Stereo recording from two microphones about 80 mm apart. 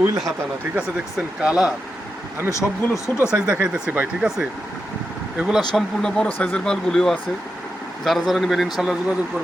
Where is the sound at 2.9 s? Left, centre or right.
Left.